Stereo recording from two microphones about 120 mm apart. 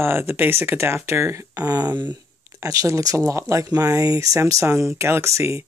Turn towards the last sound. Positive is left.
turn(degrees=-25)  # may be behind; listen again after turning